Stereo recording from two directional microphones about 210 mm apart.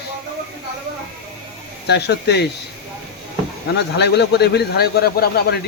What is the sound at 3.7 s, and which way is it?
A man's voice, 55° left (ahead or behind).